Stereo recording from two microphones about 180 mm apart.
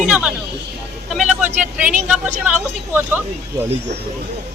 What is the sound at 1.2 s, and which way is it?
Speech, 40° right (ahead or behind).